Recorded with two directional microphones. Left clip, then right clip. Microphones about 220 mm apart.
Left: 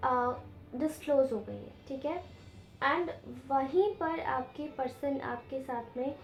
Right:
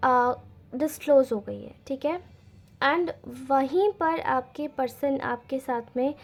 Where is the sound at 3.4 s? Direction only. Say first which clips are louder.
Right 6 dB; 45° right (ahead or behind).